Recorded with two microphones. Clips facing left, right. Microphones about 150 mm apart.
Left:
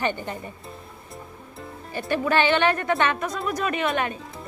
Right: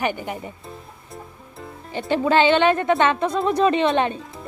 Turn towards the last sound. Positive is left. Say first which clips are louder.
# right 6 dB
turn(degrees=-25)  # may be behind; listen again after turning